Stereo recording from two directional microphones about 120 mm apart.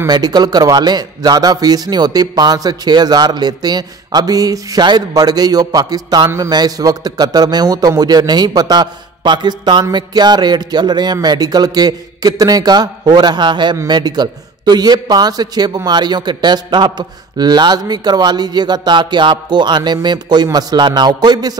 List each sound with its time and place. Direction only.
0.0 s a man's voice: 35° right (ahead or behind)